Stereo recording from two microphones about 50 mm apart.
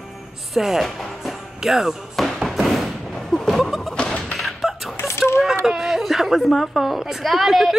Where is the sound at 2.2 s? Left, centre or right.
Centre.